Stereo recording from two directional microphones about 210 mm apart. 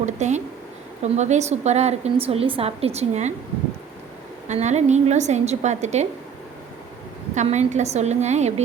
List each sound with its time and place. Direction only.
0.0 s a sound: 35° right (ahead or behind)
1.0 s a woman's voice: 35° right (ahead or behind)
4.4 s a woman's voice: 30° right (ahead or behind)
7.3 s a woman's voice: 35° right (ahead or behind)